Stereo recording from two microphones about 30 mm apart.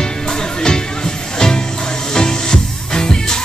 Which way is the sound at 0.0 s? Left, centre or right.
Left.